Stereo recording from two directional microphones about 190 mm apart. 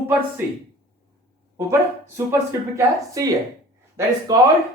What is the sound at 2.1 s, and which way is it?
A woman's voice, 15° right (ahead or behind).